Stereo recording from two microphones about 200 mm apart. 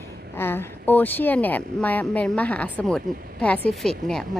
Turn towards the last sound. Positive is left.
turn(degrees=0)  # may be behind; listen again after turning